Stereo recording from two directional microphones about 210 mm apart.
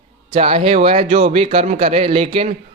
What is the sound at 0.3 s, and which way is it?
A man's voice, 25° right (ahead or behind).